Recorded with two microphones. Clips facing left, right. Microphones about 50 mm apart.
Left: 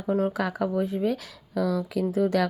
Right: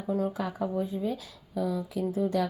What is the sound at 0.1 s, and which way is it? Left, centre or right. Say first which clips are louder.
Speech: left 4 dB; left.